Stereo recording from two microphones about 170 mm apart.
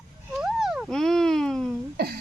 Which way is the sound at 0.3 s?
Centre (ahead or behind).